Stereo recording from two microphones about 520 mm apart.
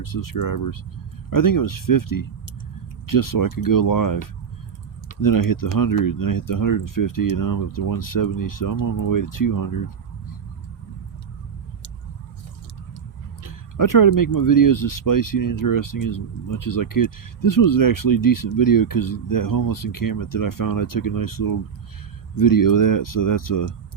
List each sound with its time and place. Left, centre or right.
0.0 s speech: left
13.4 s speech: left